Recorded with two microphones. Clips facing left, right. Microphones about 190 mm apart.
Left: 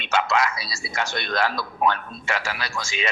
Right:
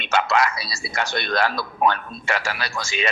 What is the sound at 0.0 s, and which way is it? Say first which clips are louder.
Speech: right 2 dB; 65° right (ahead or behind).